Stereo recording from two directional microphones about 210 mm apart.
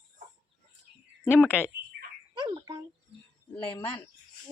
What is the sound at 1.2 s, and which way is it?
Speech, 5° right (ahead or behind).